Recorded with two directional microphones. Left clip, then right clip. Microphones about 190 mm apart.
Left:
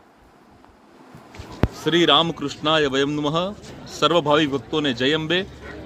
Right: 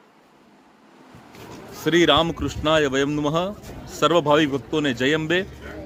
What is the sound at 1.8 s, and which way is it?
A man's voice, 5° right (ahead or behind).